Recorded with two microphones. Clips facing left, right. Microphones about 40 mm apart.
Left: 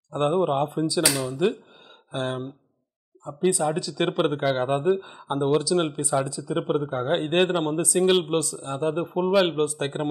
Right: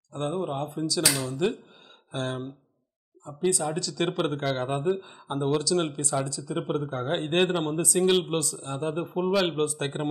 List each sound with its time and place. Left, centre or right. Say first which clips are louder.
0.1 s speech: left 7 dB; left
0.8 s speech: right 1 dB; centre
1.1 s a man's voice: left 3 dB; centre
3.3 s a man's voice: left 4 dB; centre